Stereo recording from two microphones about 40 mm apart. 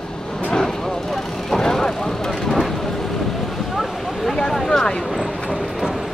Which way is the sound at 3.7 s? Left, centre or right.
Centre.